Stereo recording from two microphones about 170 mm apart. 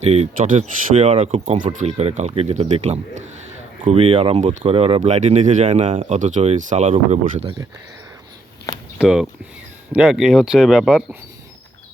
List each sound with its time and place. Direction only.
0.3 s speech: 50° right (ahead or behind)
9.0 s speech: 5° right (ahead or behind)